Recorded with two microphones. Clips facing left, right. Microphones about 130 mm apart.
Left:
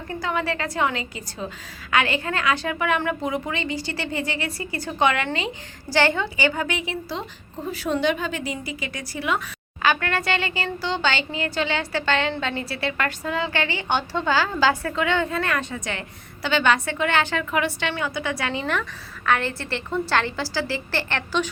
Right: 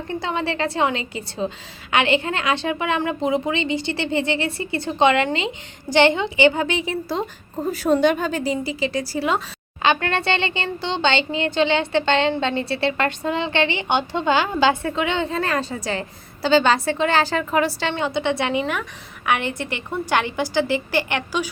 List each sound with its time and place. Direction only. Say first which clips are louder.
0.1 s speech: right 1 dB; 25° right (ahead or behind)
6.8 s a woman's voice: right 5 dB; 40° right (ahead or behind); by 18.6 s 20° right (ahead or behind)
18.6 s a woman's voice: right 1 dB; 10° right (ahead or behind)